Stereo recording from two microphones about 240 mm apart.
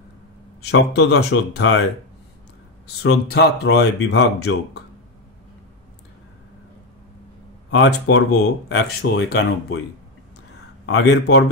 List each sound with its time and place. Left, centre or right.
0.6 s speech: left
3.0 s speech: left
7.7 s speech: left
10.9 s speech: left